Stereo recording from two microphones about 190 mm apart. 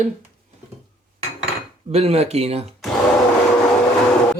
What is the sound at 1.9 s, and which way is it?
Speech, 35° right (ahead or behind).